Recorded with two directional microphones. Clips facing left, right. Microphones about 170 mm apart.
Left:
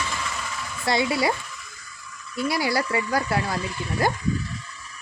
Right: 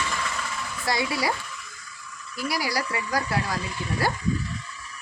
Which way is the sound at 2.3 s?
25° left (ahead or behind).